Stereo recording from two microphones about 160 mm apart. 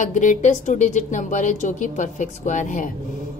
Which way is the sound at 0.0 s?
55° left (ahead or behind).